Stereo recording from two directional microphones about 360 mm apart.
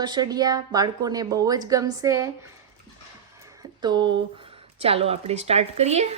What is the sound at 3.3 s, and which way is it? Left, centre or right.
A woman's voice, centre.